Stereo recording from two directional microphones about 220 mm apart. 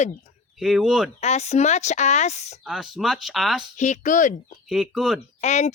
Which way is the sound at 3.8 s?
35° left (ahead or behind).